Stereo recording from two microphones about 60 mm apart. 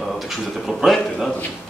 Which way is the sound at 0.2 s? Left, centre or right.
Centre.